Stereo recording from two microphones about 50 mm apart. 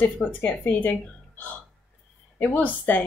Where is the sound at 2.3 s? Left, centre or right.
Left.